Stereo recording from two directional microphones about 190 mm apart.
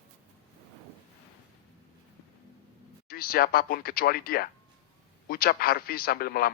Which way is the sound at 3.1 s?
50° left (ahead or behind).